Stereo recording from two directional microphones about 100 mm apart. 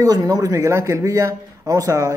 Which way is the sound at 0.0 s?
40° right (ahead or behind).